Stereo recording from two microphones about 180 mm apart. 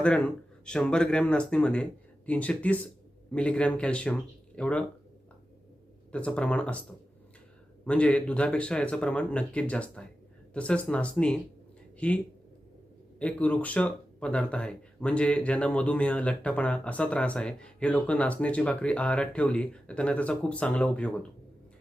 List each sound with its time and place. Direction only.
0.0 s speech: 5° left (ahead or behind)
6.1 s speech: 5° left (ahead or behind)
7.9 s speech: 5° left (ahead or behind)